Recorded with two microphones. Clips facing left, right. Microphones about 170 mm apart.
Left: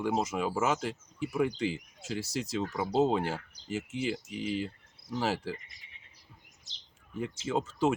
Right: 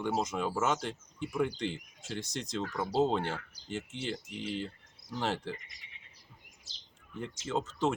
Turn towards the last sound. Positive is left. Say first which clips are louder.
# left 3 dB
turn(degrees=10)  # may be behind; listen again after turning